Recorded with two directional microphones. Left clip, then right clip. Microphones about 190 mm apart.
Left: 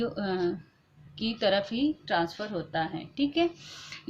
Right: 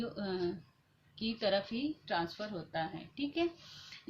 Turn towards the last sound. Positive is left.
turn(degrees=30)  # may be behind; listen again after turning